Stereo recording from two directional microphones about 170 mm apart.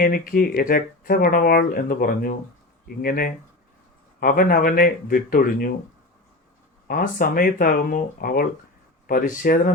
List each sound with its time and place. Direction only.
0.0 s speech: 55° left (ahead or behind)
6.8 s speech: 55° left (ahead or behind)